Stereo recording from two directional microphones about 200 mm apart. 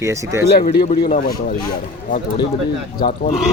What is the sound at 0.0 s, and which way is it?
Speech, 15° right (ahead or behind).